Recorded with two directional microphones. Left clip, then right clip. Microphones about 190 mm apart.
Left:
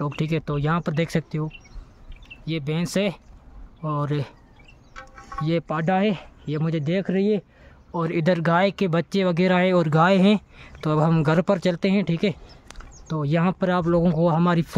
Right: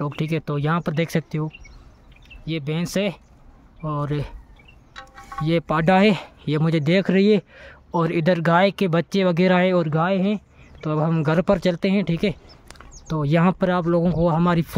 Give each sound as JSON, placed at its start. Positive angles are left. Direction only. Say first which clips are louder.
{"t": 0.0, "sound": "speech", "louder": "right 1 dB", "side_deg": -5}
{"t": 4.9, "sound": "a sound", "louder": "right 1 dB", "side_deg": -40}
{"t": 5.4, "sound": "speech", "louder": "right 4 dB", "side_deg": -15}
{"t": 8.0, "sound": "speech", "louder": "right 2 dB", "side_deg": -10}
{"t": 11.4, "sound": "speech", "louder": "right 2 dB", "side_deg": -10}